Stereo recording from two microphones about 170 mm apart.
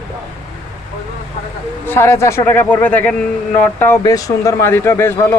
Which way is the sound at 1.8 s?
15° left (ahead or behind).